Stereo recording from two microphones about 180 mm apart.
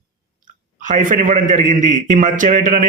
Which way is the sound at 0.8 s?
45° right (ahead or behind).